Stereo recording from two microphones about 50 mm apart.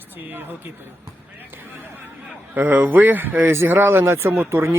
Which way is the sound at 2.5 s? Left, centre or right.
Right.